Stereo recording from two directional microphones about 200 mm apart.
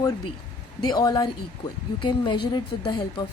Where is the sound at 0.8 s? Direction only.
20° left (ahead or behind).